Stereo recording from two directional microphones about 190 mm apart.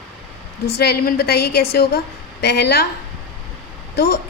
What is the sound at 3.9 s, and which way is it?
Speech, 55° left (ahead or behind).